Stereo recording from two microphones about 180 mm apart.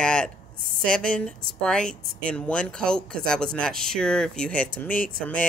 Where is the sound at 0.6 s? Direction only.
50° right (ahead or behind).